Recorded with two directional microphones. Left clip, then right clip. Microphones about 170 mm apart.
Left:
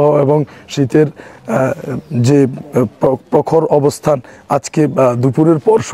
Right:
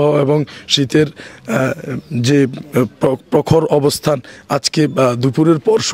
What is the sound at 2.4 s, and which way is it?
Speech, 35° right (ahead or behind).